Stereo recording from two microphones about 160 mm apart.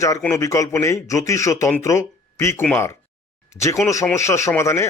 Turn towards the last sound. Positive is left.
turn(degrees=15)  # may be behind; listen again after turning